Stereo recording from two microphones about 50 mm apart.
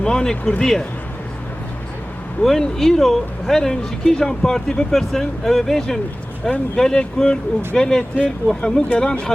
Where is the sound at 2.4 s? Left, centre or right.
Centre.